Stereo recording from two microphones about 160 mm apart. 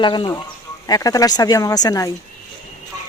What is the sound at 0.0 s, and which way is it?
Speech, 30° left (ahead or behind).